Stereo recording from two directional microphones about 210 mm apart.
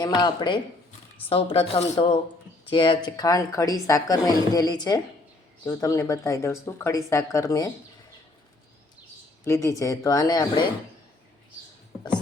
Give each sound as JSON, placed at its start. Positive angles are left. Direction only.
{"t": 0.0, "sound": "speech", "side_deg": 20}
{"t": 9.4, "sound": "speech", "side_deg": 15}